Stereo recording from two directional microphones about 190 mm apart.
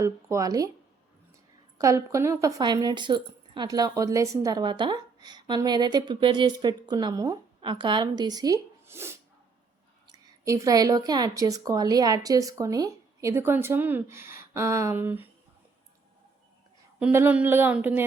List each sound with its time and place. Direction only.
0.0 s a woman's voice: 15° right (ahead or behind)
1.8 s a woman's voice: 15° right (ahead or behind)
17.0 s a woman's voice: 10° right (ahead or behind)